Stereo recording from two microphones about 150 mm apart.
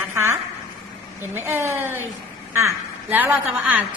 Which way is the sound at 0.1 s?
20° right (ahead or behind).